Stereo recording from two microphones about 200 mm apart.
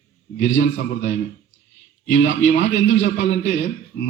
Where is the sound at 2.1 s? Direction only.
65° left (ahead or behind).